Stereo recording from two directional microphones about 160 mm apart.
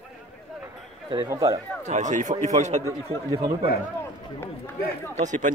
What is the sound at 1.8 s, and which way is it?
Speech, 50° right (ahead or behind).